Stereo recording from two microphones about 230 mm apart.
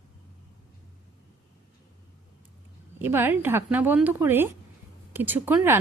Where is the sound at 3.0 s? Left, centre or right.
Centre.